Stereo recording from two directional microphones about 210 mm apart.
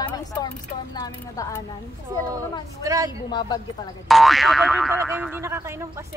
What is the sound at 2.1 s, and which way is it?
Speech, 15° right (ahead or behind).